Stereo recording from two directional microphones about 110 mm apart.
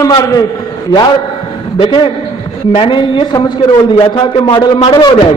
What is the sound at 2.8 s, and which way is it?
A man's voice, 50° left (ahead or behind).